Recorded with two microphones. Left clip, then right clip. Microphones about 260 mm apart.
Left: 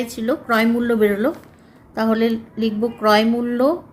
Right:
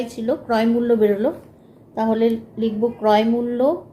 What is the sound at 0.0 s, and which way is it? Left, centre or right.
A woman's voice, left.